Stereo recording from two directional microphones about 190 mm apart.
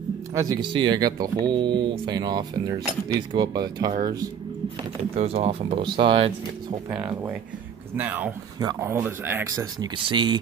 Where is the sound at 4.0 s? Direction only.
20° right (ahead or behind).